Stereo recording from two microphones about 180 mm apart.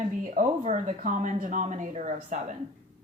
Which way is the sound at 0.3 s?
45° right (ahead or behind).